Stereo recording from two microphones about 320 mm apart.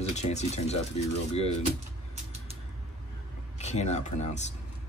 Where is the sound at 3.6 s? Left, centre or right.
Left.